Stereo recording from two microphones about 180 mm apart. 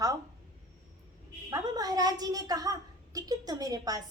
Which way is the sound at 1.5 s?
20° right (ahead or behind).